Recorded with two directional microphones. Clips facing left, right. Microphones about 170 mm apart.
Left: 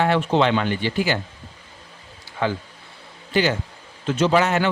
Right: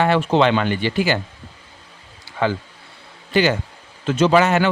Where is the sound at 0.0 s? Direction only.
85° right.